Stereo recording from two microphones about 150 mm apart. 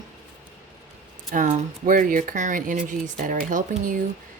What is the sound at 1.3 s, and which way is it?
Speech, 55° right (ahead or behind).